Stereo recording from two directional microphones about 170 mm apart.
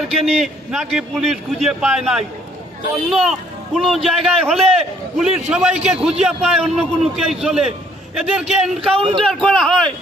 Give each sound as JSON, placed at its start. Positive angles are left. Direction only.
{"t": 0.1, "sound": "a man's voice", "side_deg": 0}
{"t": 8.9, "sound": "a man's voice", "side_deg": -35}
{"t": 9.3, "sound": "a man's voice", "side_deg": 0}